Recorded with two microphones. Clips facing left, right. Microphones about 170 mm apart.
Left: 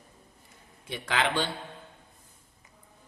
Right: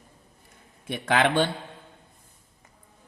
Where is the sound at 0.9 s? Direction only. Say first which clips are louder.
Right 6 dB; 55° right (ahead or behind).